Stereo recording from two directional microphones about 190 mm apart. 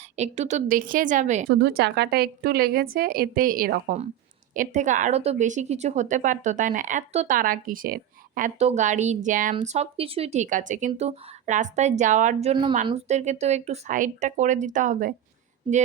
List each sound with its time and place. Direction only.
0.2 s a woman's voice: 35° right (ahead or behind)
1.5 s a woman's voice: 55° right (ahead or behind); by 15.1 s 40° right (ahead or behind)